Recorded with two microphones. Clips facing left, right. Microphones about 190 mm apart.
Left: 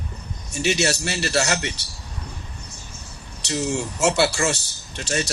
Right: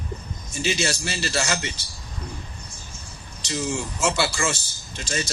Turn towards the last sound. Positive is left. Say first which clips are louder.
# left 3 dB
turn(degrees=65)  # may be behind; listen again after turning